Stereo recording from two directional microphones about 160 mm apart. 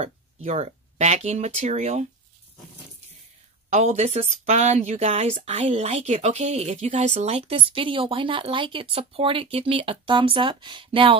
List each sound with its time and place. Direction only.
0.0 s speech: 40° right (ahead or behind)
3.7 s speech: 45° right (ahead or behind)